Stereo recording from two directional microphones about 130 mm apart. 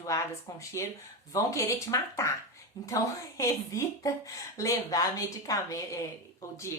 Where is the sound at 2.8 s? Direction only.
30° left (ahead or behind).